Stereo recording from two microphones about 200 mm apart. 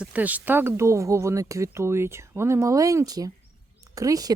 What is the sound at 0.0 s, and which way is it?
Speech, 5° right (ahead or behind).